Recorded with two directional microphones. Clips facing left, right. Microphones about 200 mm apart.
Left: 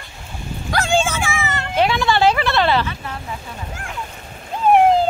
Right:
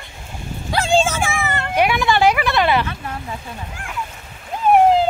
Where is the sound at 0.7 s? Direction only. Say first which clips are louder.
Right 2 dB; 35° right (ahead or behind); by 1.7 s 55° right (ahead or behind).